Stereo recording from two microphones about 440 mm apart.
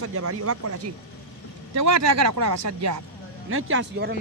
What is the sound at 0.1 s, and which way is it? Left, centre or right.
Speech, right.